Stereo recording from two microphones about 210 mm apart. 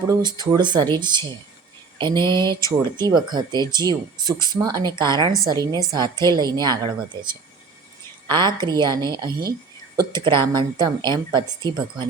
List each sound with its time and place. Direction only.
0.1 s speech: 20° right (ahead or behind)
2.0 s a sound: 20° right (ahead or behind)
2.3 s speech: 20° right (ahead or behind)
8.3 s speech: 20° right (ahead or behind)